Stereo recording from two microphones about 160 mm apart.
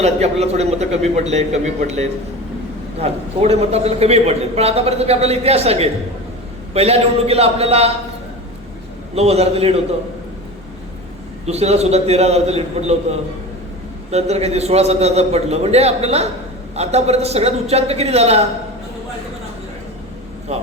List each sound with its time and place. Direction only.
0.0 s a man's voice: 40° right (ahead or behind)
9.1 s a man's voice: 40° right (ahead or behind)
11.4 s a man's voice: 40° right (ahead or behind)